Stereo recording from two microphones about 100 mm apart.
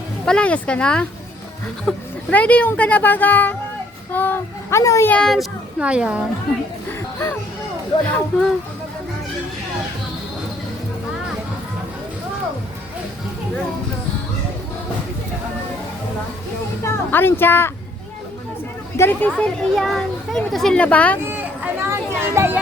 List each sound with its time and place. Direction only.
0.3 s speech: 10° left (ahead or behind)
4.1 s child singing: 20° left (ahead or behind)
4.8 s speech: 30° left (ahead or behind)
5.0 s speech: 10° left (ahead or behind)
5.8 s a woman's voice: 10° right (ahead or behind)
8.0 s speech: 15° left (ahead or behind)
16.8 s speech: 20° left (ahead or behind)
18.9 s child singing: 20° left (ahead or behind)
19.7 s a child's voice: 5° left (ahead or behind)
21.2 s a sound: 20° right (ahead or behind)